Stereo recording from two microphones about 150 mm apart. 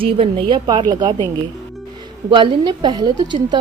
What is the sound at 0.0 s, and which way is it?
Speech, 40° right (ahead or behind).